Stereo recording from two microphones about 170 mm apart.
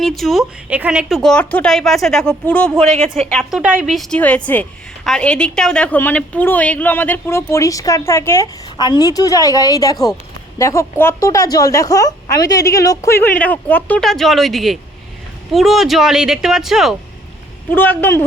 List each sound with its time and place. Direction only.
0.2 s a woman's voice: centre (ahead or behind)
17.7 s a woman's voice: 10° left (ahead or behind)